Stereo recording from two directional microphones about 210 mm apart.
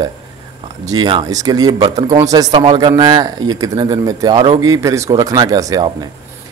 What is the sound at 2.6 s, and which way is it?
A man's voice, 30° right (ahead or behind).